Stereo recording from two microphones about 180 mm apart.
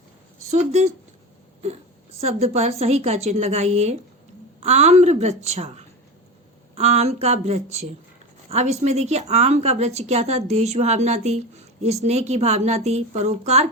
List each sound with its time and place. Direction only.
0.5 s a woman's voice: 40° right (ahead or behind)
2.2 s a woman's voice: 35° right (ahead or behind)